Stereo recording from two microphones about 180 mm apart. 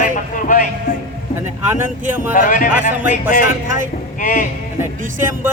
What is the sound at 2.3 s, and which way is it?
Speech, 50° left (ahead or behind).